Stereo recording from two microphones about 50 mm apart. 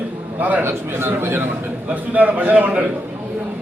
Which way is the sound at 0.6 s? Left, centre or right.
Right.